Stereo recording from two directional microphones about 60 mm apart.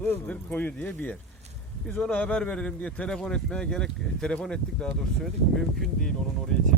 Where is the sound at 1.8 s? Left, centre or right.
Centre.